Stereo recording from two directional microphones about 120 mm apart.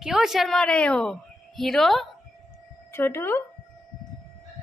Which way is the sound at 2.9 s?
20° left (ahead or behind).